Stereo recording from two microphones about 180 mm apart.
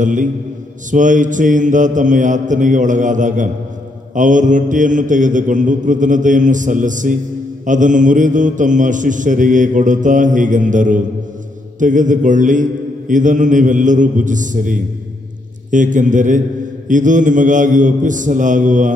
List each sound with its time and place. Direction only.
0.0 s speech: 45° right (ahead or behind)